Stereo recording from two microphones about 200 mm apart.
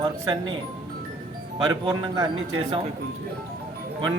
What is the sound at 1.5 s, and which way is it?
Speech, 20° right (ahead or behind).